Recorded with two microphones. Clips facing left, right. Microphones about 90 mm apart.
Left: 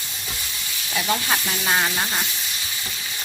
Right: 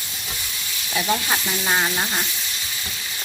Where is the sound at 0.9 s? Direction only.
Centre (ahead or behind).